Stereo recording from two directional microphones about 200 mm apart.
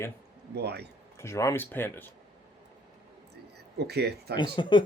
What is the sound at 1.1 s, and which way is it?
Speech, 15° left (ahead or behind).